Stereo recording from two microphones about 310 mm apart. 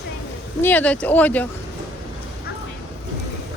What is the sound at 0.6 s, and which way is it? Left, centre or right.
Speech, centre.